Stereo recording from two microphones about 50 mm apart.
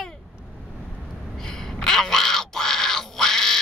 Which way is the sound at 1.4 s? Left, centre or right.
Centre.